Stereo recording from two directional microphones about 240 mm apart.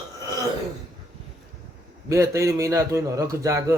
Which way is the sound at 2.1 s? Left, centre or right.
Centre.